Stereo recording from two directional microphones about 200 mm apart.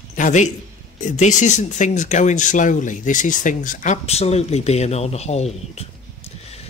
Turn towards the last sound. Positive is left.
turn(degrees=30)  # may be behind; listen again after turning